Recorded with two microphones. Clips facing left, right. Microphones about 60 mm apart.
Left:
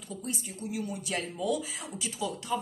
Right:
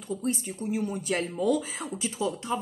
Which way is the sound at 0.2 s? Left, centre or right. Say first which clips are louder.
Right 4 dB; right.